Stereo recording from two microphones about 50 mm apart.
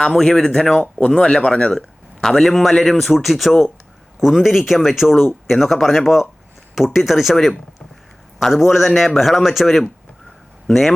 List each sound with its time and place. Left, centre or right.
0.2 s speech: centre
2.2 s speech: centre
8.4 s speech: centre